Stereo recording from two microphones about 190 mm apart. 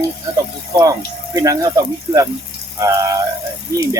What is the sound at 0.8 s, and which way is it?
Speech, 20° right (ahead or behind).